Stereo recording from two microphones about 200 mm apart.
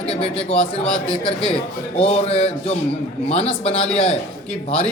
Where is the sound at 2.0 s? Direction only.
30° left (ahead or behind).